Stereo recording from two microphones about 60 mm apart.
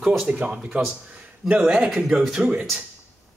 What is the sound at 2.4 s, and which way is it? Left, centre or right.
Speech, right.